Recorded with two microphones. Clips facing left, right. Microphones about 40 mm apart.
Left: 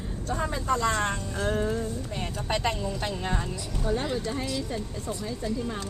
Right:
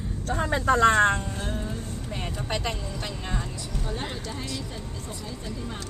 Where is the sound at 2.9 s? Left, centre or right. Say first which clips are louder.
Left 3 dB; centre.